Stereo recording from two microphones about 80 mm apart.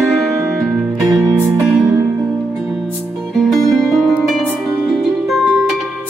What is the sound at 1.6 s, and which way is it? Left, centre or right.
Music, centre.